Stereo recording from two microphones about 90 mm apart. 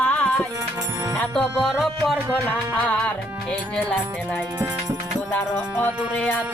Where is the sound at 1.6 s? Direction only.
Centre (ahead or behind).